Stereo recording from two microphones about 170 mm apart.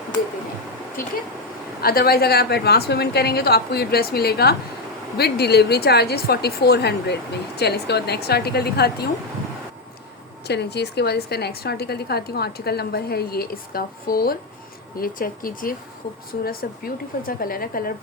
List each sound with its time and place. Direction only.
1.8 s a woman's voice: 65° left (ahead or behind)
10.4 s a woman's voice: 80° left; by 17.9 s 60° left (ahead or behind)